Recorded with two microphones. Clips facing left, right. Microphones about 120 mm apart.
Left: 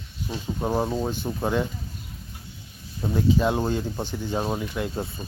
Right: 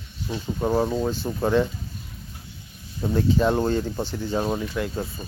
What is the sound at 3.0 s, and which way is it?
Speech, 5° left (ahead or behind).